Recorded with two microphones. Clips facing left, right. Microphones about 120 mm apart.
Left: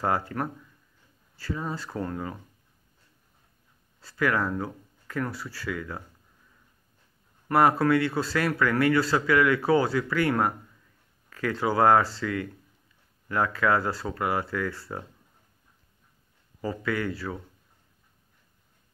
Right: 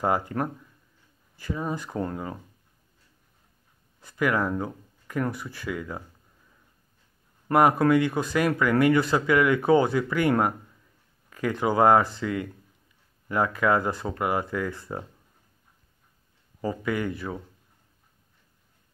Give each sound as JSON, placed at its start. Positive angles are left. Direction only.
{"t": 0.0, "sound": "speech", "side_deg": -20}
{"t": 4.0, "sound": "speech", "side_deg": -20}
{"t": 7.5, "sound": "speech", "side_deg": -20}
{"t": 16.6, "sound": "speech", "side_deg": -20}